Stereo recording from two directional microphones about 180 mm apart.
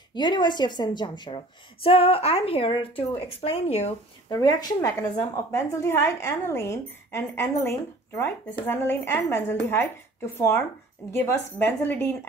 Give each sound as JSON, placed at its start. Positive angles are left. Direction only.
{"t": 0.1, "sound": "a woman's voice", "side_deg": 25}
{"t": 4.3, "sound": "a woman's voice", "side_deg": 20}